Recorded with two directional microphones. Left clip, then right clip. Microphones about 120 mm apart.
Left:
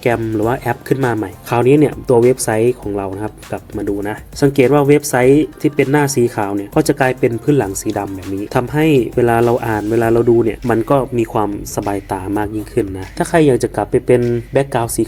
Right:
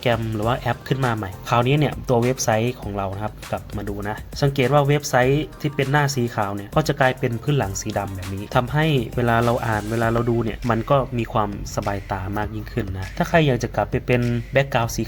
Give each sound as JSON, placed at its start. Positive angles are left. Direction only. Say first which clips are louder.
{"t": 0.0, "sound": "speech", "louder": "left 6 dB", "side_deg": 30}
{"t": 4.0, "sound": "speech", "louder": "left 6 dB", "side_deg": 45}